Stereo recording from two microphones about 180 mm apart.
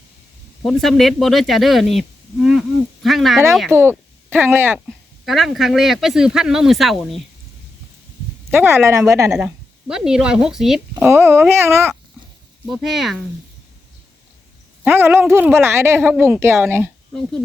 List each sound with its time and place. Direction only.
0.6 s speech: centre (ahead or behind)
3.7 s speech: 15° right (ahead or behind)
5.2 s speech: centre (ahead or behind)
8.4 s a woman's voice: 15° right (ahead or behind)
9.3 s speech: 5° right (ahead or behind)
11.1 s a woman's voice: 15° right (ahead or behind)
12.6 s speech: centre (ahead or behind)
14.8 s a woman's voice: 10° right (ahead or behind)